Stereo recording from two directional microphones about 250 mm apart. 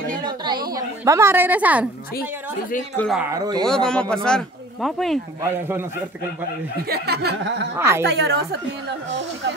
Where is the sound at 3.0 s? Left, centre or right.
Centre.